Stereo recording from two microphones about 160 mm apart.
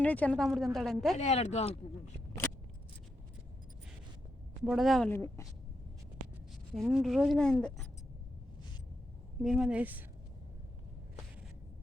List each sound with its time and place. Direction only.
0.0 s a woman's voice: 10° left (ahead or behind)
1.1 s speech: 45° left (ahead or behind)
4.6 s a woman's voice: centre (ahead or behind)
5.1 s a woman's voice: 15° left (ahead or behind)
6.7 s a woman's voice: centre (ahead or behind)
9.4 s a woman's voice: centre (ahead or behind)